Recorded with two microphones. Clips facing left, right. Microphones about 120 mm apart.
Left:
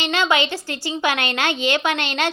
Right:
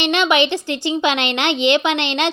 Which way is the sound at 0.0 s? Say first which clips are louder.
Right 4 dB; 20° right (ahead or behind).